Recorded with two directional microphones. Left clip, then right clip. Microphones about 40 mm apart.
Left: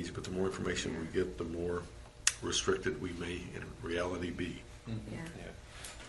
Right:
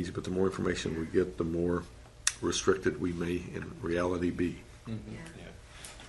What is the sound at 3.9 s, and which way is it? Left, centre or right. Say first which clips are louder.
Speech: right 5 dB; right.